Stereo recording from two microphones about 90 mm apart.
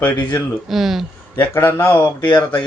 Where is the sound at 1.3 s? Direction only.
25° left (ahead or behind).